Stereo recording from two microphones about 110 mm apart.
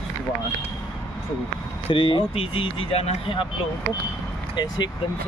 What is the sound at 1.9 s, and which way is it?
Speech, 50° left (ahead or behind).